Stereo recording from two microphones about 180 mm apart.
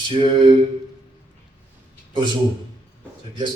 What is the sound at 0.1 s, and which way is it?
Speech, 30° right (ahead or behind).